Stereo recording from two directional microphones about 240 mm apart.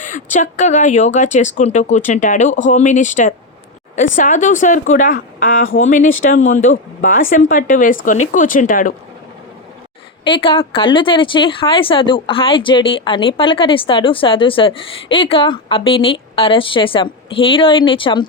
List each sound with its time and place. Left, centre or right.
0.0 s a woman's voice: left
10.2 s speech: left